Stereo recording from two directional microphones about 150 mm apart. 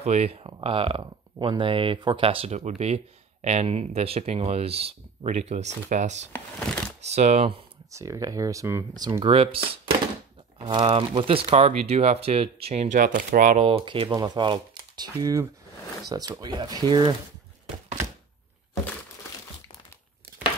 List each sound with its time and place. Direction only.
0.0 s speech: 45° right (ahead or behind)
7.9 s speech: 20° right (ahead or behind)
9.2 s speech: 40° right (ahead or behind); by 13.6 s 60° right (ahead or behind)
13.6 s speech: 35° right (ahead or behind)